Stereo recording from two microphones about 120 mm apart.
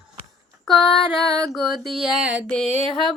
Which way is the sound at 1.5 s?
5° right (ahead or behind).